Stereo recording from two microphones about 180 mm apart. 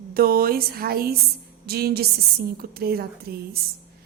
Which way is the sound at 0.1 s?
55° right (ahead or behind).